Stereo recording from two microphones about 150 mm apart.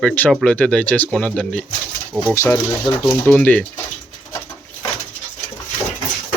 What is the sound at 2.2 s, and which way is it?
Speech, 15° left (ahead or behind).